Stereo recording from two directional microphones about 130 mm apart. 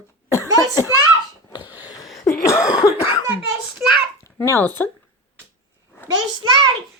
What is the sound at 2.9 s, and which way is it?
Cough, 45° left (ahead or behind).